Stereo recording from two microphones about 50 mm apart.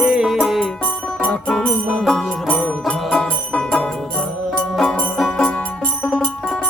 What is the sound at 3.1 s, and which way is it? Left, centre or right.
Music, centre.